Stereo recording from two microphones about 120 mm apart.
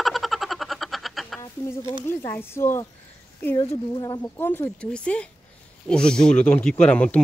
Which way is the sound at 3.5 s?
35° left (ahead or behind).